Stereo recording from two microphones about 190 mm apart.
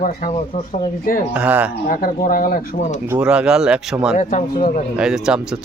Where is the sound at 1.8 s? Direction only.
45° left (ahead or behind).